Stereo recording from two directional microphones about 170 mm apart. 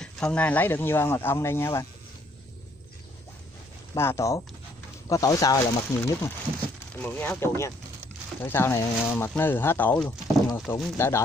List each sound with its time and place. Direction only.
0.0 s speech: 5° left (ahead or behind)
3.9 s speech: 15° left (ahead or behind)